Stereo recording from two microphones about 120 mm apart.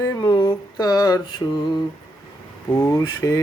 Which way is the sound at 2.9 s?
25° left (ahead or behind).